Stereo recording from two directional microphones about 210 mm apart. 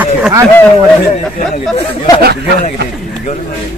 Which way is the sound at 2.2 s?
50° right (ahead or behind).